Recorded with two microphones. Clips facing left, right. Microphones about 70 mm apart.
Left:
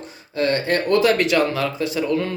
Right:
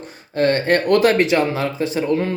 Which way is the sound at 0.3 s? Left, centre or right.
Right.